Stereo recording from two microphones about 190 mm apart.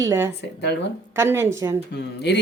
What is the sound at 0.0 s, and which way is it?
A woman's voice, 15° right (ahead or behind).